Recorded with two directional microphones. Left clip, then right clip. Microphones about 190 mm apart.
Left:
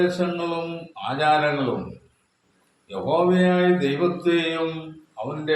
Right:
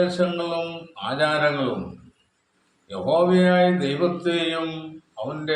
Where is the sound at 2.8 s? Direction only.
5° left (ahead or behind).